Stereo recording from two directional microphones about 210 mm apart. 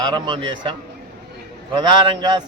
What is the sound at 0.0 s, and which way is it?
Speech, 20° right (ahead or behind).